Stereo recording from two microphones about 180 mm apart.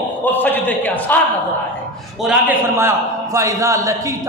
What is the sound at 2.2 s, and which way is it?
A man's voice, 10° right (ahead or behind).